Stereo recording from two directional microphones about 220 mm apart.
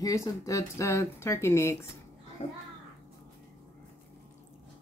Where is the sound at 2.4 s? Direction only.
30° left (ahead or behind).